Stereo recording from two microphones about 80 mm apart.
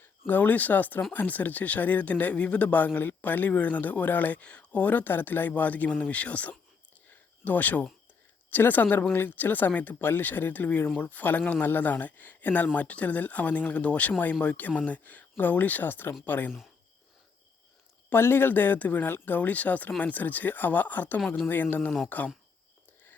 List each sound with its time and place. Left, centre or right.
0.3 s speech: left
18.1 s speech: left